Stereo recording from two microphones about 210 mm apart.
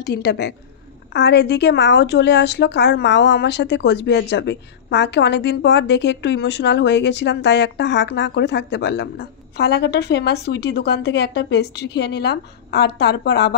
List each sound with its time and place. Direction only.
0.0 s a woman's voice: 50° left (ahead or behind)